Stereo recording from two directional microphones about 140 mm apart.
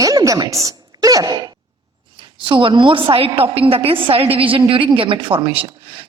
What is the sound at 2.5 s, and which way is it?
A woman's voice, 35° right (ahead or behind).